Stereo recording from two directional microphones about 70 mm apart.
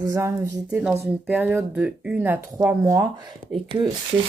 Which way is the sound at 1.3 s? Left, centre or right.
Right.